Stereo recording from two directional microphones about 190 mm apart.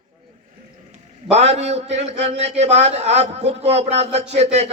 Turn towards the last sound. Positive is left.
turn(degrees=-35)  # may be behind; listen again after turning